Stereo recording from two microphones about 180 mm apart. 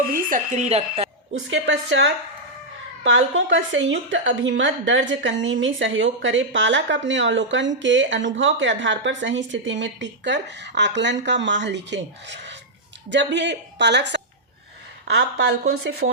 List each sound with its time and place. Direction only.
0.3 s a woman's voice: 45° right (ahead or behind)
1.5 s a woman's voice: 85° right; by 16.0 s 65° right (ahead or behind)